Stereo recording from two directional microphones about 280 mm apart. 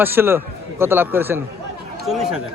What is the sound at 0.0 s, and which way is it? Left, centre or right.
A man's voice, centre.